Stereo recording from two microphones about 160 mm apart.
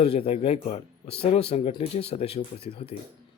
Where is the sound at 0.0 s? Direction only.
40° left (ahead or behind).